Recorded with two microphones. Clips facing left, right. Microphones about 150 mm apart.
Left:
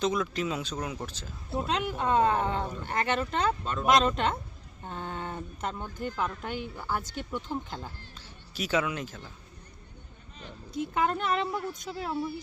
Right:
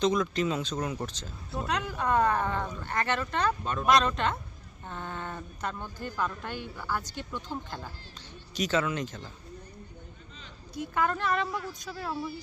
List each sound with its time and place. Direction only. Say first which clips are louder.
0.0 s speech: right 2 dB; 5° left (ahead or behind)
1.5 s speech: left 2 dB; 25° left (ahead or behind)
3.6 s speech: right 1 dB; 10° right (ahead or behind)
3.9 s speech: left 2 dB; 25° left (ahead or behind)
8.5 s speech: right 1 dB; 5° left (ahead or behind)
10.9 s speech: even; 20° left (ahead or behind)